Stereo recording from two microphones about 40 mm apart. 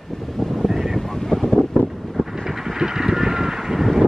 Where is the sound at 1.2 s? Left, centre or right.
Centre.